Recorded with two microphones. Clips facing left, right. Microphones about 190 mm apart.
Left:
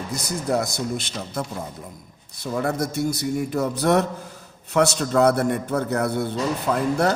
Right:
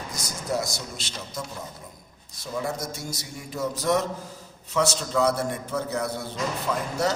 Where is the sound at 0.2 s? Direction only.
60° left (ahead or behind).